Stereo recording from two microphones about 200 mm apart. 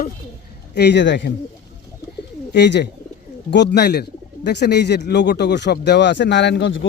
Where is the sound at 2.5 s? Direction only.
60° left (ahead or behind).